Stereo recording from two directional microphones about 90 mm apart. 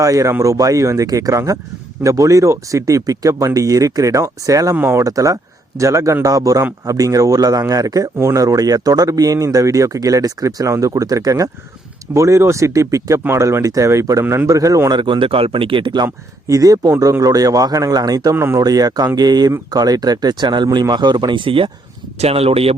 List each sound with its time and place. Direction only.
0.0 s speech: 40° right (ahead or behind)
5.0 s speech: 40° right (ahead or behind)
14.9 s speech: 60° right (ahead or behind)
16.5 s speech: 40° right (ahead or behind)
18.3 s speech: 30° right (ahead or behind)
18.6 s speech: 45° right (ahead or behind); by 22.7 s 90° right